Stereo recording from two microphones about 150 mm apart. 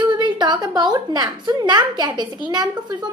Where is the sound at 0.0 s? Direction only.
30° right (ahead or behind).